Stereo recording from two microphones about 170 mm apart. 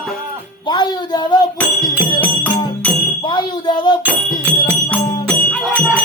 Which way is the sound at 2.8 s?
10° left (ahead or behind).